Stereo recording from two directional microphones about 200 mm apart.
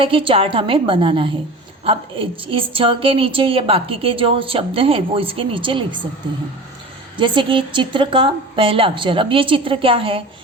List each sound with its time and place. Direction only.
0.0 s a woman's voice: 25° right (ahead or behind)
7.2 s a woman's voice: 25° right (ahead or behind)